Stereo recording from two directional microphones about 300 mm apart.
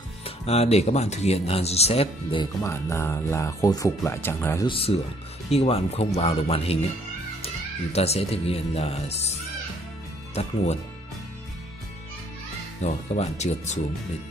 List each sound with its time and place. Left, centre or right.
0.2 s speech: left
2.6 s speech: centre
12.8 s speech: left